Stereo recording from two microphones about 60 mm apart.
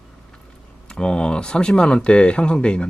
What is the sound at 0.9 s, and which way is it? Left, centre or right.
Speech, centre.